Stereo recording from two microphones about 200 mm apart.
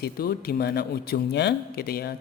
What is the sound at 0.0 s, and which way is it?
Speech, 50° left (ahead or behind).